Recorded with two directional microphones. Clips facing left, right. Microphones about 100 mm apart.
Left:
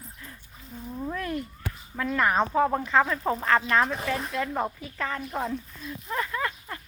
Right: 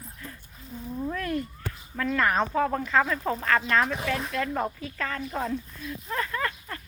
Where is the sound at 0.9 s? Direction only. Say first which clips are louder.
Right 1 dB; 10° left (ahead or behind).